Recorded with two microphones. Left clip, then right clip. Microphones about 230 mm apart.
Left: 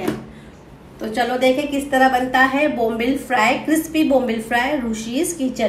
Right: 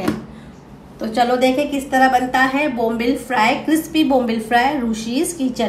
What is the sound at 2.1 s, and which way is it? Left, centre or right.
A woman's voice, centre.